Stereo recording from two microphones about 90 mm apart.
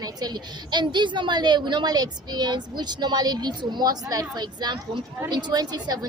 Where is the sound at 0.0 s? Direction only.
50° right (ahead or behind).